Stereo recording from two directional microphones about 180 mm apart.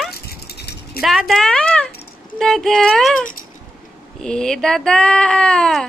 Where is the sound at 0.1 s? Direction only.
60° left (ahead or behind).